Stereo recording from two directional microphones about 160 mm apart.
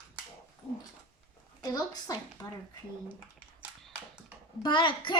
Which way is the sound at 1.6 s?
25° left (ahead or behind).